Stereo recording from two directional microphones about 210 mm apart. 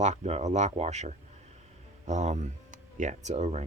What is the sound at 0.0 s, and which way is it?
Speech, 35° right (ahead or behind).